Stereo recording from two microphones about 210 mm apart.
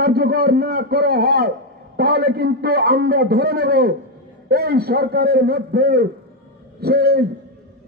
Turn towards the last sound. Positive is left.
turn(degrees=-50)  # may be behind; listen again after turning